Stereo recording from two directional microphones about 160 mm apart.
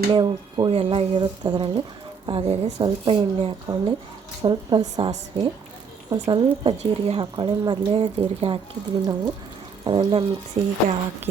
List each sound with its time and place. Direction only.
0.1 s speech: 30° right (ahead or behind)